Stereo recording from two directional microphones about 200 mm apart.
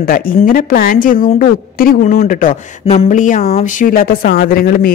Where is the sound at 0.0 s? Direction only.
45° left (ahead or behind).